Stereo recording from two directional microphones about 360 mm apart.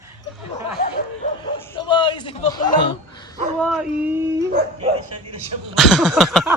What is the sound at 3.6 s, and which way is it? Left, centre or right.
Speech, centre.